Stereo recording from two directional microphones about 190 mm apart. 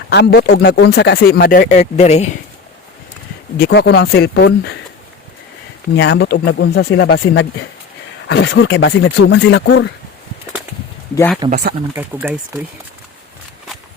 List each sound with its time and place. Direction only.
0.1 s speech: 60° left (ahead or behind)
1.8 s speech: 35° left (ahead or behind)
3.6 s speech: 65° left (ahead or behind)
6.0 s speech: 65° left (ahead or behind)
8.3 s speech: 65° left (ahead or behind)
11.1 s speech: 10° left (ahead or behind)
11.9 s speech: 10° right (ahead or behind)